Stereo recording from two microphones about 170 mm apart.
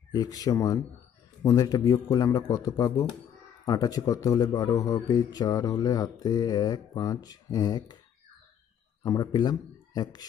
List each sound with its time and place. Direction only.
0.1 s a man's voice: 20° left (ahead or behind)
9.0 s speech: 20° left (ahead or behind)